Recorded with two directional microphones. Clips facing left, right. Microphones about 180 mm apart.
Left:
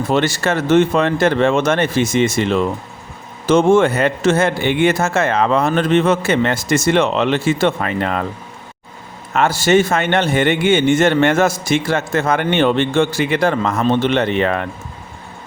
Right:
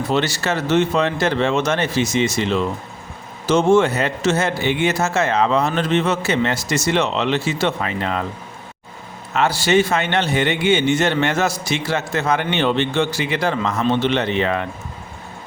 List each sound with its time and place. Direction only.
0.1 s a man's voice: 50° left (ahead or behind)
9.3 s a man's voice: 50° left (ahead or behind)